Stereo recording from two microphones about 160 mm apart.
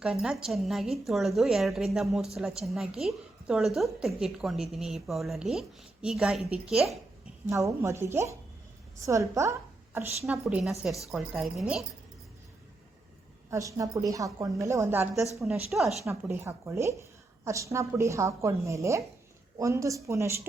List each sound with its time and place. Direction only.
0.0 s a woman's voice: centre (ahead or behind)
7.5 s a woman's voice: 20° right (ahead or behind)
10.2 s a woman's voice: 5° right (ahead or behind)
13.5 s a woman's voice: 20° right (ahead or behind)
15.7 s a woman's voice: centre (ahead or behind)
16.0 s a woman's voice: 15° right (ahead or behind)